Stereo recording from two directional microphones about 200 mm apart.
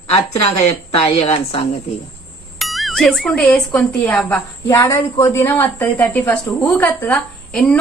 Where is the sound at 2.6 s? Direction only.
Centre (ahead or behind).